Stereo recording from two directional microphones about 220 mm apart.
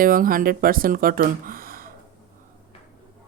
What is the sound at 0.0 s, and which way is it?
Speech, 40° right (ahead or behind).